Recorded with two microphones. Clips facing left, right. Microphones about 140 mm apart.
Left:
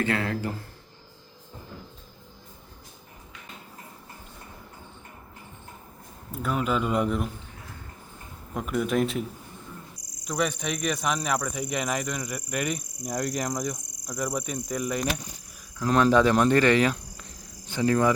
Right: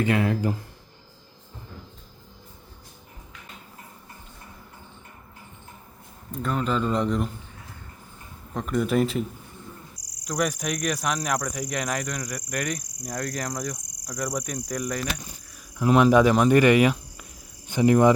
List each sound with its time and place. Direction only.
0.0 s speech: 15° right (ahead or behind)
6.3 s a man's voice: 5° left (ahead or behind)
8.5 s speech: 5° left (ahead or behind)
10.2 s speech: 5° right (ahead or behind)
15.8 s speech: 10° right (ahead or behind)